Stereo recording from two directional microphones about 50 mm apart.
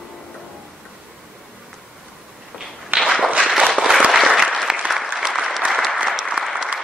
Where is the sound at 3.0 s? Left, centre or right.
Centre.